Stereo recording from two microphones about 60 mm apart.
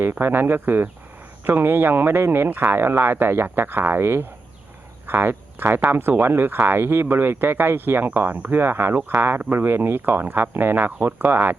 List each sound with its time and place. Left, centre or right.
0.0 s speech: right